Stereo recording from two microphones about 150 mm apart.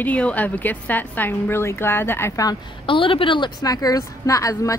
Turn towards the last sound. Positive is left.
turn(degrees=20)  # may be behind; listen again after turning